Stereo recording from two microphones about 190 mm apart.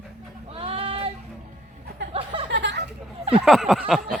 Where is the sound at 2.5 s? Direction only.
65° right (ahead or behind).